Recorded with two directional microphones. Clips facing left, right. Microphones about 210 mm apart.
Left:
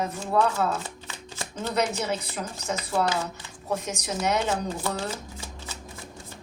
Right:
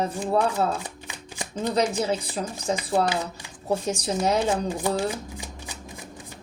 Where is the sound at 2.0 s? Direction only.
30° right (ahead or behind).